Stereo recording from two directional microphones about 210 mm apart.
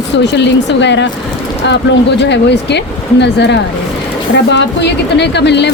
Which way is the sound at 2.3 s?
55° left (ahead or behind).